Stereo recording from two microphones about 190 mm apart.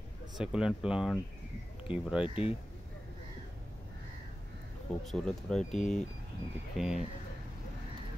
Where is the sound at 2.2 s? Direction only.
30° left (ahead or behind).